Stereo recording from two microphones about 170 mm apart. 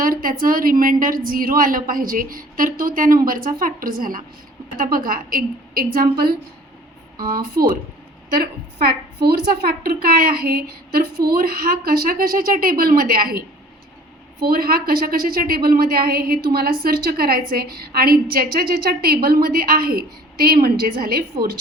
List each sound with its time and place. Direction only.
0.0 s a woman's voice: 55° right (ahead or behind)
7.3 s a woman's voice: 60° right (ahead or behind)
14.4 s a woman's voice: 60° right (ahead or behind)